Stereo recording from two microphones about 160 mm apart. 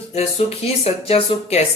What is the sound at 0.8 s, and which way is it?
Speech, 45° left (ahead or behind).